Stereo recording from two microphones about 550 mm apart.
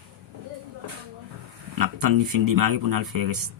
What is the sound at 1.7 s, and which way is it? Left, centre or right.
Speech, right.